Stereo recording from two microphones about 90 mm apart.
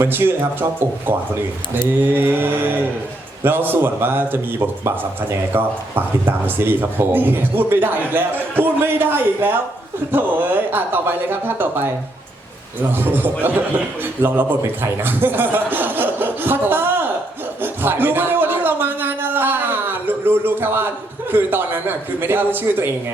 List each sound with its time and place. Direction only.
0.0 s speech: 25° right (ahead or behind)
5.5 s speech: 25° right (ahead or behind)
13.0 s speech: 25° right (ahead or behind)
17.6 s a sound: 25° right (ahead or behind)
21.3 s speech: 25° right (ahead or behind)